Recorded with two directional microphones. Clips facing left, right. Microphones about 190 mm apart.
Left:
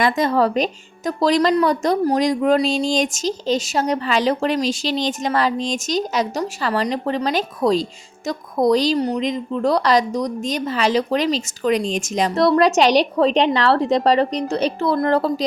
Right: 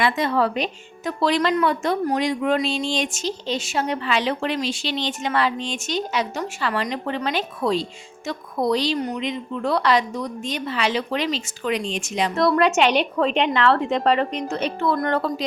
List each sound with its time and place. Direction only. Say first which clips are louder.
0.0 s speech: left 3 dB; 40° left (ahead or behind)